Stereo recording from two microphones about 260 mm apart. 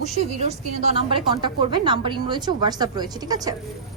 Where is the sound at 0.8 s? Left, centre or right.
Right.